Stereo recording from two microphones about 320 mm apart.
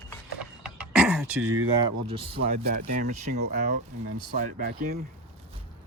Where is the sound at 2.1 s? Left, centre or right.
Centre.